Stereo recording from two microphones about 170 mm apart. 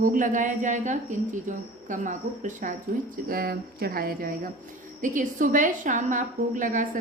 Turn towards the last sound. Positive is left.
turn(degrees=-50)  # may be behind; listen again after turning